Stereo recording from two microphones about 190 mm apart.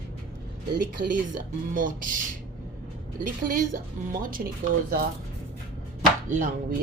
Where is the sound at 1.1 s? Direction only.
45° right (ahead or behind).